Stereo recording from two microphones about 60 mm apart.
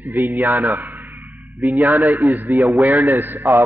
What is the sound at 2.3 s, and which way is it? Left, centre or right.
A man's voice, right.